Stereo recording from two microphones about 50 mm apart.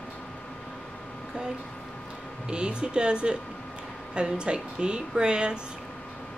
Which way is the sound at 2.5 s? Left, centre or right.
Centre.